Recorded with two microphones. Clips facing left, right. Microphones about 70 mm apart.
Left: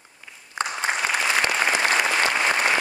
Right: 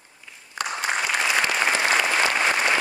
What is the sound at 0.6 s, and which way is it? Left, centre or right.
Applause, left.